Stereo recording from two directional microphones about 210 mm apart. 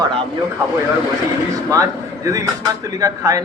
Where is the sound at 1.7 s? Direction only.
15° right (ahead or behind).